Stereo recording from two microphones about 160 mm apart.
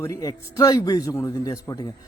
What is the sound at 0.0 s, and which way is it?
Speech, 20° left (ahead or behind).